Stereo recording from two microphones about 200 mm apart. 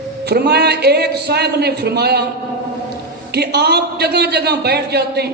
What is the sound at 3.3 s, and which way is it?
A man's voice, 55° right (ahead or behind).